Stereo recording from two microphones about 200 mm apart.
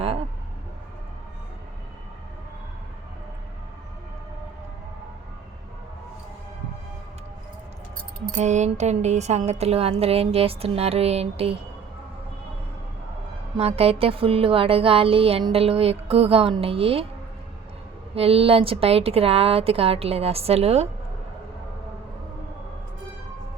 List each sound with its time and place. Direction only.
8.3 s a woman's voice: 35° right (ahead or behind)
13.6 s speech: 30° right (ahead or behind)
18.1 s speech: 30° right (ahead or behind)